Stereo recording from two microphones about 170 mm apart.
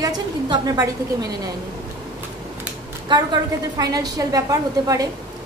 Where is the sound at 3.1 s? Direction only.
25° right (ahead or behind).